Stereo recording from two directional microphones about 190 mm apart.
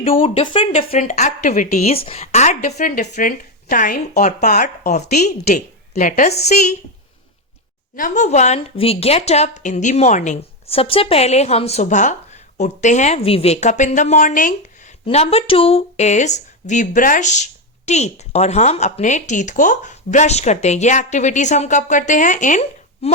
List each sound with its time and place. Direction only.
0.2 s speech: 25° left (ahead or behind)
7.9 s speech: 45° left (ahead or behind)